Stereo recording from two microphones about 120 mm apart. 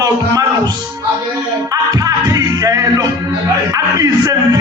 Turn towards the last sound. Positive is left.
turn(degrees=-30)  # may be behind; listen again after turning